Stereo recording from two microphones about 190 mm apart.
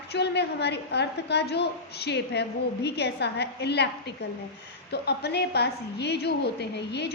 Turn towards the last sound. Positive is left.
turn(degrees=60)  # may be behind; listen again after turning